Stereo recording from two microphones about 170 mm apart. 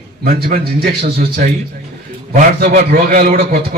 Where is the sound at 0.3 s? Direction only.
60° right (ahead or behind).